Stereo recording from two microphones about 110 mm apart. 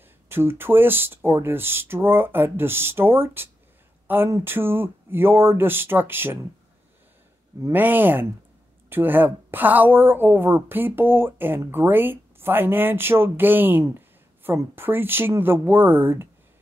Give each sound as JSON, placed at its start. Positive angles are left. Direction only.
{"t": 0.3, "sound": "a woman's voice", "side_deg": -20}
{"t": 7.6, "sound": "a woman's voice", "side_deg": -15}